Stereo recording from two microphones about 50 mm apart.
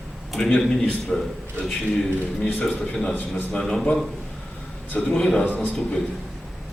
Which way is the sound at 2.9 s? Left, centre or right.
Centre.